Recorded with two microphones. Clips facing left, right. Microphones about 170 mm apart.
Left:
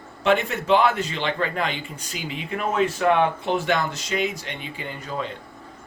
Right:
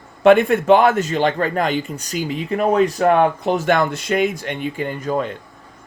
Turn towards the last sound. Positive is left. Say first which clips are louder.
# right 9 dB
turn(degrees=-50)  # may be behind; listen again after turning